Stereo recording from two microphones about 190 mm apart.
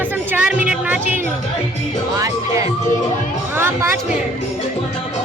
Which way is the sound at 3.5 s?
10° right (ahead or behind).